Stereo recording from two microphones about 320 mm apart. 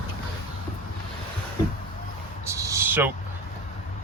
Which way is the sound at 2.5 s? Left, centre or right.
Centre.